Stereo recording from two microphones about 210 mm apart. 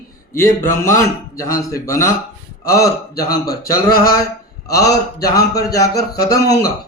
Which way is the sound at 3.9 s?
45° left (ahead or behind).